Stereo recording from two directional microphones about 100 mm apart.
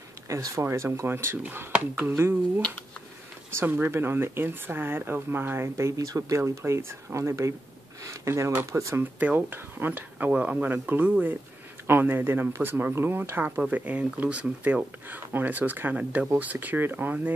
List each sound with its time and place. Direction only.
0.3 s speech: 30° right (ahead or behind)
9.2 s speech: 15° right (ahead or behind)